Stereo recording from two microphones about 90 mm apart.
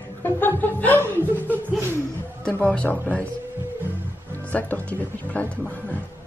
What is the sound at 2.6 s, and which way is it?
Speech, 10° left (ahead or behind).